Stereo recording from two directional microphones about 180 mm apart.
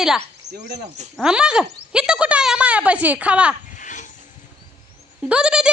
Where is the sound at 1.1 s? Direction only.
5° right (ahead or behind).